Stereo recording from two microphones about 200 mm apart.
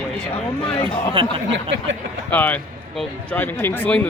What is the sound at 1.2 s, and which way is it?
Speech, 25° right (ahead or behind).